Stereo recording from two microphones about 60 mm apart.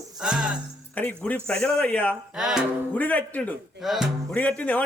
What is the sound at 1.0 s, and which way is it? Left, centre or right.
A man's voice, left.